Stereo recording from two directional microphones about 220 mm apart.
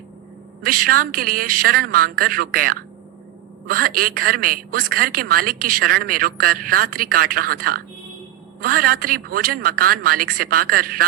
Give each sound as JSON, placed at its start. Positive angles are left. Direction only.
{"t": 0.6, "sound": "a man's voice", "side_deg": -40}